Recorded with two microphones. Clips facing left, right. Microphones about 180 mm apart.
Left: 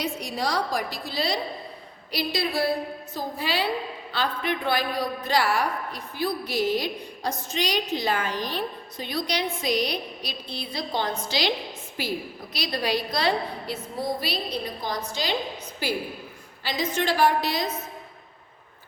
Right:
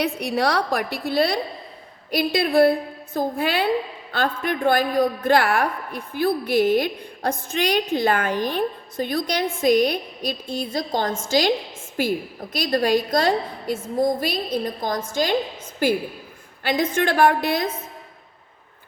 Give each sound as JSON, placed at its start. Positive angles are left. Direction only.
{"t": 0.0, "sound": "a woman's voice", "side_deg": -60}